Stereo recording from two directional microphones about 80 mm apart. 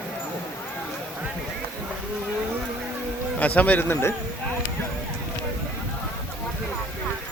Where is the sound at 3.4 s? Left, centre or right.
Centre.